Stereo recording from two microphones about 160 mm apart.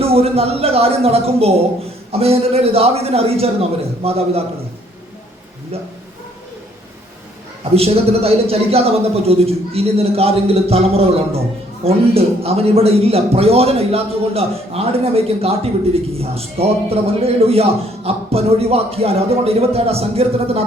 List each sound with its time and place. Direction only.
0.0 s a man's voice: 40° right (ahead or behind)
7.8 s a man's voice: 40° right (ahead or behind)